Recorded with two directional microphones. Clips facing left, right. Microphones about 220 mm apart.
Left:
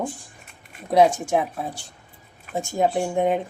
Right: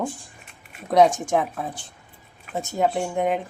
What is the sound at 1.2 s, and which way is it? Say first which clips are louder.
Speech: even; 10° left (ahead or behind).